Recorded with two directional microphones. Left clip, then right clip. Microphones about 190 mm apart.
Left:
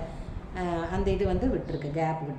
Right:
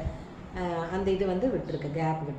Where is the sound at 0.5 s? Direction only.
40° left (ahead or behind).